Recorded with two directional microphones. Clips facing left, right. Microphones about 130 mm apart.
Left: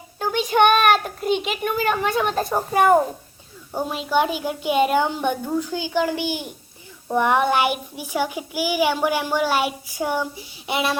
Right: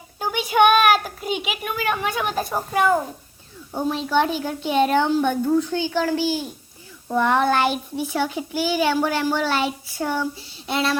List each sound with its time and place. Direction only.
0.2 s a sound: 5° right (ahead or behind)
1.8 s a woman's voice: centre (ahead or behind)
2.7 s a child's voice: 50° left (ahead or behind)
3.7 s a child's voice: 10° left (ahead or behind)